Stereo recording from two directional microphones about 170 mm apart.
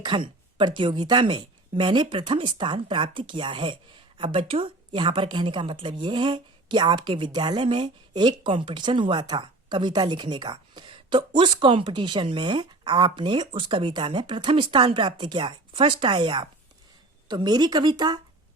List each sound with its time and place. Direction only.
0.0 s a woman's voice: 25° right (ahead or behind)